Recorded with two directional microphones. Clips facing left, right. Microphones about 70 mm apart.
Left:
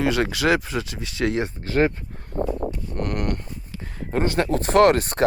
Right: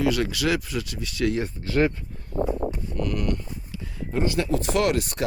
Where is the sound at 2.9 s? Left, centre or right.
Left.